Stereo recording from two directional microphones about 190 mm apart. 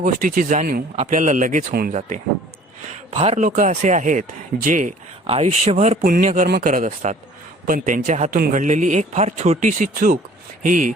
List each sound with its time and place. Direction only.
0.0 s a man's voice: 45° right (ahead or behind)
6.0 s a man's voice: 50° right (ahead or behind)